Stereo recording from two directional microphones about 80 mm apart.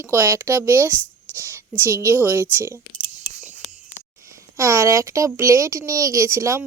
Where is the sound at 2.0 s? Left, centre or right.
Right.